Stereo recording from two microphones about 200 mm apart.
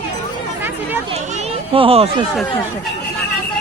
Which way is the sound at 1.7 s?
30° right (ahead or behind).